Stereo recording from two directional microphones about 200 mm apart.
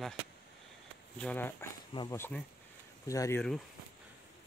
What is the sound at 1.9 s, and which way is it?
Speech, 25° left (ahead or behind).